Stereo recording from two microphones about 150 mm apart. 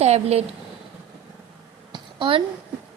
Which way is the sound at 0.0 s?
45° right (ahead or behind).